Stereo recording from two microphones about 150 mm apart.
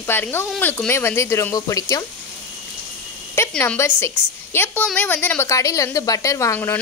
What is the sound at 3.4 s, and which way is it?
A woman's voice, 15° left (ahead or behind).